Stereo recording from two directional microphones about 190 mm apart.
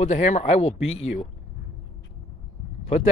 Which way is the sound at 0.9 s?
90° left.